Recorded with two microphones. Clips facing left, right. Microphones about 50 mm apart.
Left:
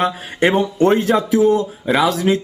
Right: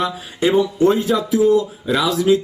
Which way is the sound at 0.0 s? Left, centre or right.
Left.